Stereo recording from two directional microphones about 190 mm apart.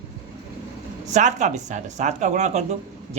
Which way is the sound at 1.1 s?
40° right (ahead or behind).